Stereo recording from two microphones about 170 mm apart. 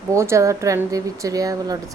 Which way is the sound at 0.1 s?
15° right (ahead or behind).